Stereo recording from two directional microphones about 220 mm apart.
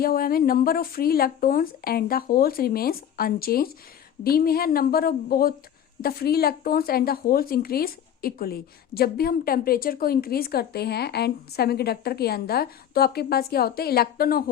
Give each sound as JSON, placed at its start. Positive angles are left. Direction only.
{"t": 0.0, "sound": "speech", "side_deg": 40}